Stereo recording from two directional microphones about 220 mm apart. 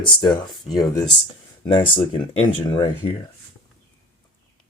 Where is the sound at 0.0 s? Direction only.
20° left (ahead or behind).